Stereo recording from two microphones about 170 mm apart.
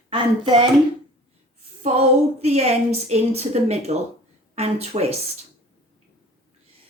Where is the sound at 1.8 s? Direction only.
40° right (ahead or behind).